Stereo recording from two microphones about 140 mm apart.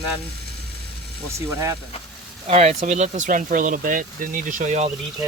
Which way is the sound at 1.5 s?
20° right (ahead or behind).